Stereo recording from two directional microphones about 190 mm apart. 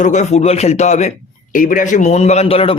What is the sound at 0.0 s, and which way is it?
Speech, 40° left (ahead or behind).